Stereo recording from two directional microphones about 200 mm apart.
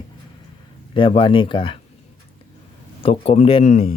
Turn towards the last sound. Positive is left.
turn(degrees=30)  # may be behind; listen again after turning